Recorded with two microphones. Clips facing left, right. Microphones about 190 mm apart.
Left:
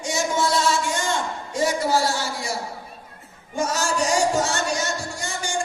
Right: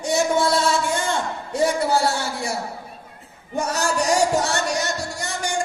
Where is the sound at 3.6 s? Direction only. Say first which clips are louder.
Right 1 dB; 65° right (ahead or behind).